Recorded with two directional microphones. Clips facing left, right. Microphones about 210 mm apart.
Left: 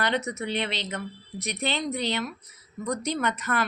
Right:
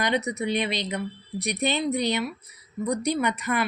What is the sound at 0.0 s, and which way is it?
Speech, 15° right (ahead or behind).